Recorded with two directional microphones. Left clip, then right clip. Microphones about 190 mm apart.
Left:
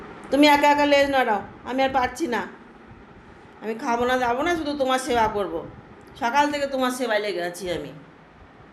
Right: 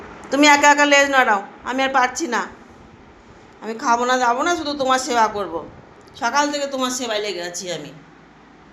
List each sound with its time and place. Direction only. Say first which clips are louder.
0.3 s a woman's voice: right 4 dB; 10° left (ahead or behind)
3.6 s a woman's voice: right 5 dB; 10° left (ahead or behind)